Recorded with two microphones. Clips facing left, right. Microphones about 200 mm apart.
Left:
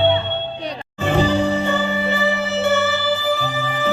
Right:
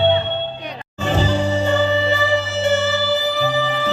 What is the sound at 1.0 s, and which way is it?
Music, 55° left (ahead or behind).